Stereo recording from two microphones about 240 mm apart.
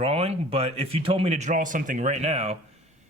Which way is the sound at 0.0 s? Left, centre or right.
Right.